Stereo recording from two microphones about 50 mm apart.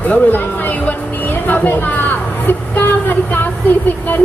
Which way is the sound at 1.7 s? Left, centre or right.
Left.